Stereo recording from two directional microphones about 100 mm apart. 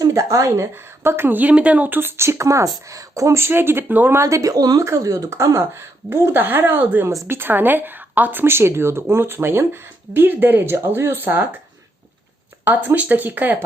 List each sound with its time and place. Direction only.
0.0 s speech: 30° right (ahead or behind)
4.2 s speech: 35° right (ahead or behind)
12.6 s speech: 20° right (ahead or behind)